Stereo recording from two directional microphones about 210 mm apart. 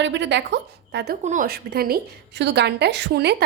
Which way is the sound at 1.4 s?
50° right (ahead or behind).